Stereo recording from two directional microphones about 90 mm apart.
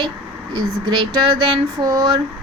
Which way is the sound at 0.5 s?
55° right (ahead or behind).